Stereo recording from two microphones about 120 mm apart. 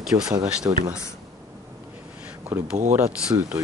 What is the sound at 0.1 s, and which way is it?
Speech, 35° right (ahead or behind).